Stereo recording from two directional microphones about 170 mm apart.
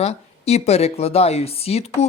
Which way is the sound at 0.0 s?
40° left (ahead or behind).